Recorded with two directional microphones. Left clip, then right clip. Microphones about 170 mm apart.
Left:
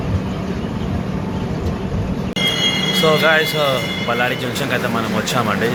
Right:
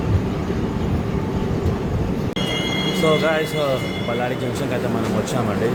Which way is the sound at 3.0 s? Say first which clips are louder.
Left 5 dB; 5° right (ahead or behind).